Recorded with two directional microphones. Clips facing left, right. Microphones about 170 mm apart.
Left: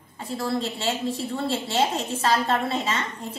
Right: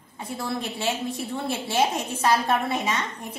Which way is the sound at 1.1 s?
15° right (ahead or behind).